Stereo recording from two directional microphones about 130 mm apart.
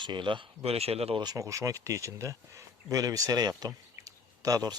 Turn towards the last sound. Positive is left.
turn(degrees=-30)  # may be behind; listen again after turning